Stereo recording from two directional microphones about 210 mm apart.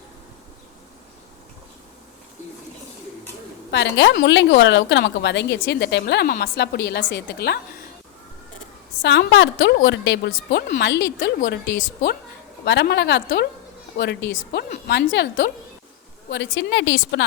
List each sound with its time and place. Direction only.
3.7 s a woman's voice: 60° left (ahead or behind)
9.0 s a woman's voice: 60° left (ahead or behind)
11.3 s a woman's voice: 40° left (ahead or behind)
12.6 s a woman's voice: 55° left (ahead or behind)